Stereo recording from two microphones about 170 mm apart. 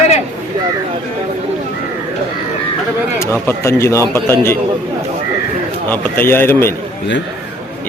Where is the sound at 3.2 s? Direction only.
15° left (ahead or behind).